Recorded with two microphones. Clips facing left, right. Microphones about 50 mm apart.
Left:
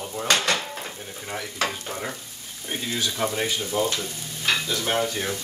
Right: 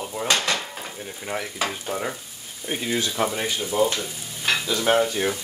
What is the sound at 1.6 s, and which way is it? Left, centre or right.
Speech, centre.